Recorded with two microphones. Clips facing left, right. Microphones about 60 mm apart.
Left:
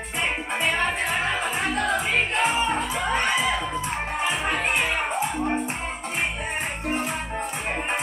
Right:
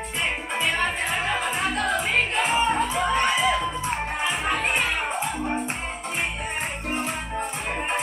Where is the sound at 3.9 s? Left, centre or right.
Centre.